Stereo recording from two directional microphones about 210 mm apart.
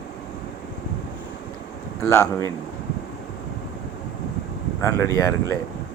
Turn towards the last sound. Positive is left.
turn(degrees=15)  # may be behind; listen again after turning